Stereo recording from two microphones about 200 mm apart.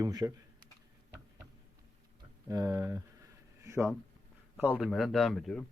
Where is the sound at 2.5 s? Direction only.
20° right (ahead or behind).